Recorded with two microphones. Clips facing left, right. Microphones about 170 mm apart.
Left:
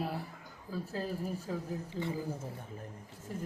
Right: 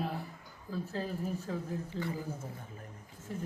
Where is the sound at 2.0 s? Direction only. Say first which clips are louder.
Left 1 dB; 10° left (ahead or behind).